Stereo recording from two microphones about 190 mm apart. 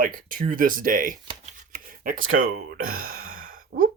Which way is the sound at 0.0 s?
45° right (ahead or behind).